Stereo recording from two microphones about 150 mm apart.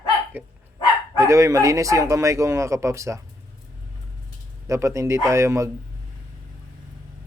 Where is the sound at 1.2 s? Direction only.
20° right (ahead or behind).